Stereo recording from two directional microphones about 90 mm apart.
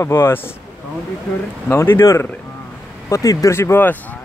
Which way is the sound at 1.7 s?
25° left (ahead or behind).